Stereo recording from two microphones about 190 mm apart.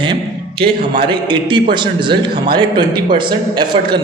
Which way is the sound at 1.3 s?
25° right (ahead or behind).